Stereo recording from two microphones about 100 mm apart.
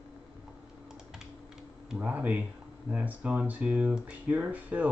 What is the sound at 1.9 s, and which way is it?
Speech, 15° right (ahead or behind).